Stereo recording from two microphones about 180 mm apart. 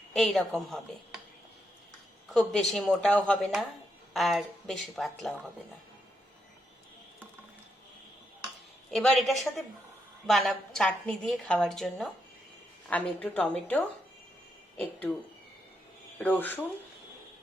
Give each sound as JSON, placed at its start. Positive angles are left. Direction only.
{"t": 0.1, "sound": "a woman's voice", "side_deg": 0}
{"t": 2.3, "sound": "a woman's voice", "side_deg": 5}
{"t": 8.9, "sound": "a woman's voice", "side_deg": 0}
{"t": 16.1, "sound": "a woman's voice", "side_deg": 10}